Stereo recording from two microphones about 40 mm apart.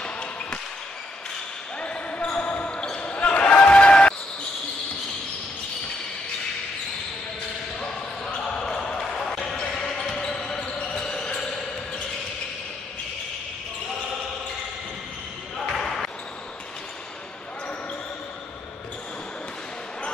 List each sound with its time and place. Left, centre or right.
0.0 s a sound: left
1.8 s basketball bounce: left
8.5 s basketball bounce: centre
15.8 s basketball bounce: centre